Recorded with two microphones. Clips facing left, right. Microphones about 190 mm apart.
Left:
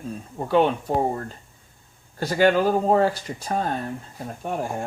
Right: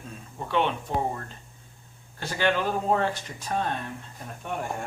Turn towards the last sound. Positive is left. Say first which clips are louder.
# left 4 dB
turn(degrees=35)  # may be behind; listen again after turning